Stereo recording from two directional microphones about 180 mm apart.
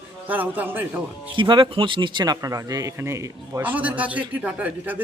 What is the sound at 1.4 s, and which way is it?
A man's voice, 25° right (ahead or behind).